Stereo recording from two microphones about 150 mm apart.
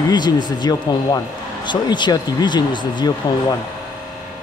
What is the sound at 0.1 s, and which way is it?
Speech, 30° left (ahead or behind).